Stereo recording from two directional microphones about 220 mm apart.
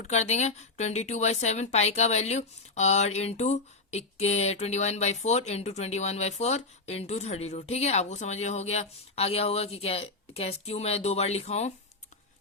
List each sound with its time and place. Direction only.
0.0 s speech: 30° left (ahead or behind)